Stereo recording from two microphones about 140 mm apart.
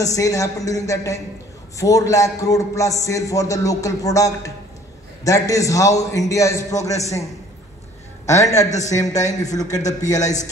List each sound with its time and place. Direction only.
0.0 s a man's voice: 25° left (ahead or behind)
8.3 s a man's voice: 20° left (ahead or behind)